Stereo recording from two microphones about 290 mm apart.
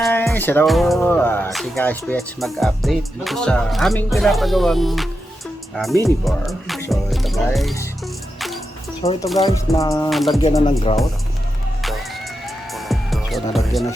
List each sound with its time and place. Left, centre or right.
0.0 s speech: centre
9.0 s speech: centre
9.4 s music: centre
10.1 s speech: centre
10.4 s music: centre
11.8 s music: centre